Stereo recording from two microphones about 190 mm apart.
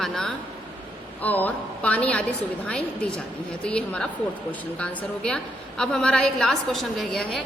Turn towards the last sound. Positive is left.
turn(degrees=5)  # may be behind; listen again after turning